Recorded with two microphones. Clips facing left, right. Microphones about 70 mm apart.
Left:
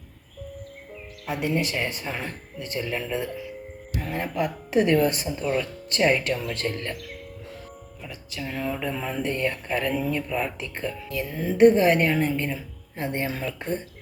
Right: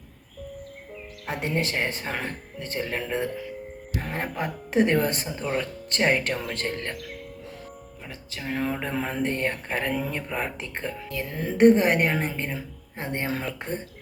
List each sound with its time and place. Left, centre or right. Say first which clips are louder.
1.4 s speech: left 1 dB; right
4.4 s speech: left 1 dB; right
6.9 s speech: even; centre
8.3 s speech: right 1 dB; right
11.3 s speech: left 3 dB; right
11.5 s speech: left 1 dB; right